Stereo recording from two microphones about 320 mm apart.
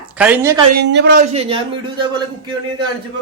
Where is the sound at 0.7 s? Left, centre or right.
Right.